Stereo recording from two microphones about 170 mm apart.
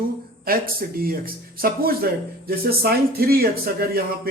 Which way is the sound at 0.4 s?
60° right (ahead or behind).